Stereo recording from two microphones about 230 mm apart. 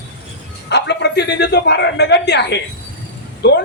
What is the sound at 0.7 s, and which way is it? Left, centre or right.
A man's voice, left.